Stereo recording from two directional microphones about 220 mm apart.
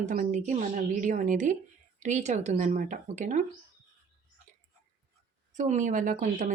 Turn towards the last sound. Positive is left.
turn(degrees=-35)  # may be behind; listen again after turning